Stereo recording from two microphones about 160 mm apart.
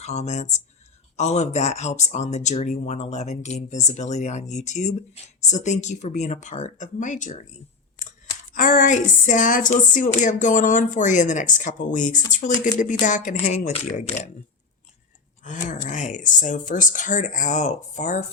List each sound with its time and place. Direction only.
0.0 s speech: 45° left (ahead or behind)
8.5 s speech: 55° left (ahead or behind)
15.4 s speech: 50° left (ahead or behind)